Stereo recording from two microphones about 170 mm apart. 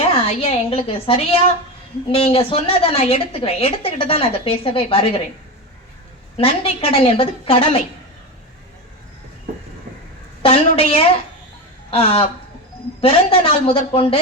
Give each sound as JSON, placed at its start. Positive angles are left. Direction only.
{"t": 0.1, "sound": "a woman's voice", "side_deg": 35}
{"t": 6.3, "sound": "a woman's voice", "side_deg": 35}
{"t": 10.4, "sound": "a woman's voice", "side_deg": 35}